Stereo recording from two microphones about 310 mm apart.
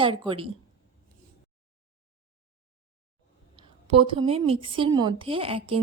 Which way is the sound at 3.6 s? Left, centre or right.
Centre.